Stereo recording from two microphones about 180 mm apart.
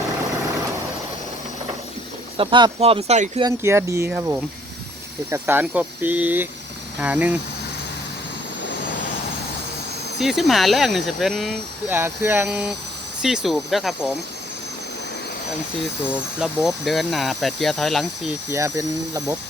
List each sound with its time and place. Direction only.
2.4 s speech: 25° right (ahead or behind)
3.4 s speech: 15° right (ahead or behind)
10.2 s speech: centre (ahead or behind)
11.9 s speech: 15° right (ahead or behind)
16.4 s speech: centre (ahead or behind)
18.5 s speech: 15° right (ahead or behind)